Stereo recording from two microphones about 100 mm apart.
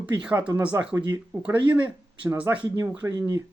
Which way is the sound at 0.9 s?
40° right (ahead or behind).